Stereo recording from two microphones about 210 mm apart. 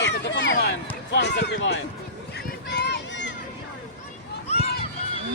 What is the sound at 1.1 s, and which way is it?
Speech, 55° left (ahead or behind).